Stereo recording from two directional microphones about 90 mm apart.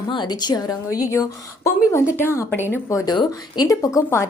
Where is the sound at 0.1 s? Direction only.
55° left (ahead or behind); by 3.0 s 25° left (ahead or behind).